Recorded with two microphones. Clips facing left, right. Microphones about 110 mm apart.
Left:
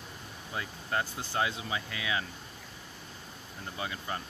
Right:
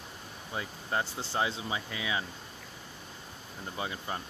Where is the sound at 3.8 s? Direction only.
25° right (ahead or behind).